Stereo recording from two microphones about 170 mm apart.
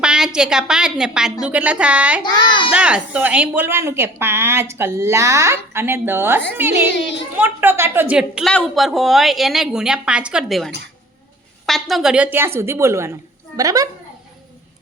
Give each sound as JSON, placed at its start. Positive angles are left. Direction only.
{"t": 0.0, "sound": "a sound", "side_deg": -5}
{"t": 0.3, "sound": "a woman's voice", "side_deg": -5}
{"t": 2.2, "sound": "a child's voice", "side_deg": 25}
{"t": 2.7, "sound": "a woman's voice", "side_deg": -5}